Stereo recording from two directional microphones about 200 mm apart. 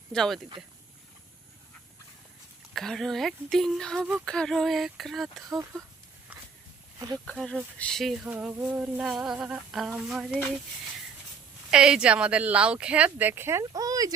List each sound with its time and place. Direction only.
0.1 s speech: centre (ahead or behind)
2.7 s a sound: centre (ahead or behind)
5.5 s speech: 15° right (ahead or behind)
6.3 s walk: 5° right (ahead or behind)
7.3 s a sound: 5° left (ahead or behind)
11.7 s speech: 5° right (ahead or behind)